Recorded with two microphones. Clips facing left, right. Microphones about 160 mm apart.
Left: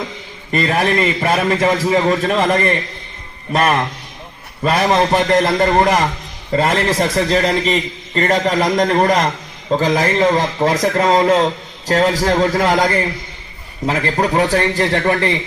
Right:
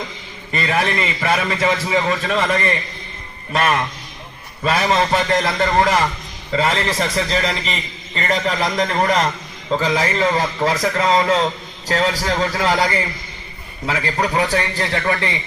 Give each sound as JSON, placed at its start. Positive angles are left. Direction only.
{"t": 0.6, "sound": "a man's voice", "side_deg": 40}
{"t": 4.8, "sound": "a man's voice", "side_deg": 45}
{"t": 10.8, "sound": "a man's voice", "side_deg": 45}